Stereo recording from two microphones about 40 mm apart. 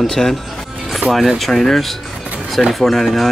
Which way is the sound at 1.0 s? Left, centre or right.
Right.